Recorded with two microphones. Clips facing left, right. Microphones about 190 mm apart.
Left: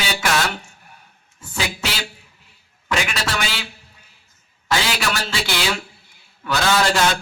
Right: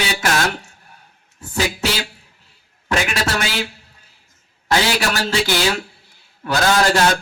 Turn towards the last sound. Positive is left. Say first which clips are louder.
# right 3 dB
turn(degrees=-40)  # may be behind; listen again after turning